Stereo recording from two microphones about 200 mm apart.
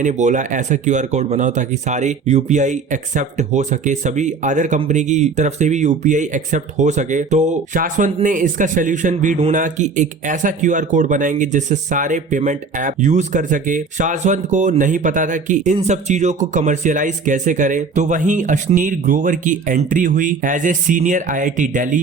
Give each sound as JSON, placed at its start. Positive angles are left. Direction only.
{"t": 0.0, "sound": "speech", "side_deg": -35}